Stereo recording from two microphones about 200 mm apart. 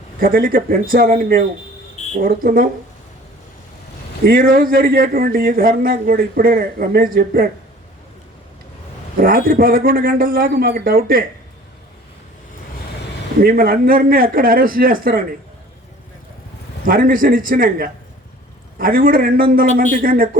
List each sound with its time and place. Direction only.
0.2 s a man's voice: 45° right (ahead or behind)
4.2 s a man's voice: 45° right (ahead or behind)
9.2 s a man's voice: 45° right (ahead or behind)
13.4 s a man's voice: 45° right (ahead or behind)
16.8 s a man's voice: 45° right (ahead or behind)